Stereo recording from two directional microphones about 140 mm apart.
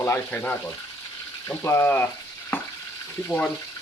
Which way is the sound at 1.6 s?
20° left (ahead or behind).